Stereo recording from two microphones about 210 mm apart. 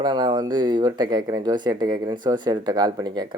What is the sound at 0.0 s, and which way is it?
Speech, 20° right (ahead or behind).